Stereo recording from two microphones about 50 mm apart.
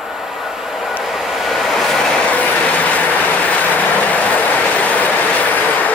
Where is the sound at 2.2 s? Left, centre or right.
Left.